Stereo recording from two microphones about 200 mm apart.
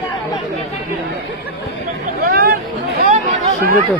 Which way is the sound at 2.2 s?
50° right (ahead or behind).